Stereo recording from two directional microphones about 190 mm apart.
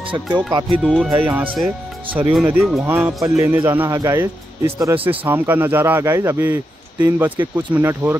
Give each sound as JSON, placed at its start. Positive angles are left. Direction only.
{"t": 0.1, "sound": "speech", "side_deg": -20}
{"t": 0.8, "sound": "a man's voice", "side_deg": 0}